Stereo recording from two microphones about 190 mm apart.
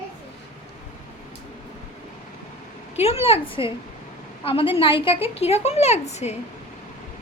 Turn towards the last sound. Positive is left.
turn(degrees=35)  # may be behind; listen again after turning